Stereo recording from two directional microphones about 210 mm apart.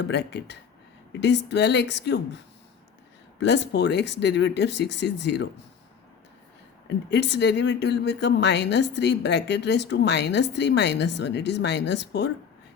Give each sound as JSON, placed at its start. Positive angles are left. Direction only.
{"t": 0.0, "sound": "speech", "side_deg": 55}
{"t": 3.4, "sound": "speech", "side_deg": 55}
{"t": 6.8, "sound": "speech", "side_deg": 55}